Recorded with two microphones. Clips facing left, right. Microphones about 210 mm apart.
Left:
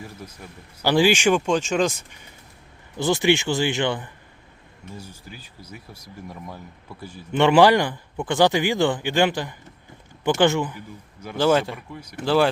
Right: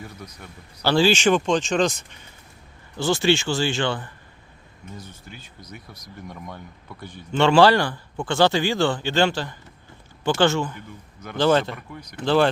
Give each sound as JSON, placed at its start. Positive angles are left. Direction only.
{"t": 0.0, "sound": "a man's voice", "side_deg": 5}
{"t": 0.9, "sound": "speech", "side_deg": 15}
{"t": 3.0, "sound": "speech", "side_deg": 20}
{"t": 5.2, "sound": "a man's voice", "side_deg": 5}
{"t": 7.3, "sound": "speech", "side_deg": 15}